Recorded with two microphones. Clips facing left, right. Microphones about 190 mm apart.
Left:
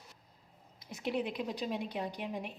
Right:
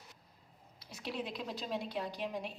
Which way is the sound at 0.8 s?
20° left (ahead or behind).